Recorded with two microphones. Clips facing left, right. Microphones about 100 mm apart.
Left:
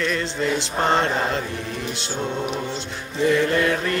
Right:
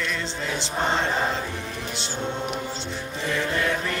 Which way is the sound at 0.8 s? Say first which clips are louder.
Left 4 dB; 60° left (ahead or behind).